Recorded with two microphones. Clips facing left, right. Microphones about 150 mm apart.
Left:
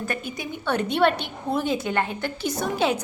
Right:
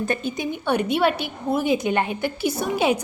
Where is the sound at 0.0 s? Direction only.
25° right (ahead or behind).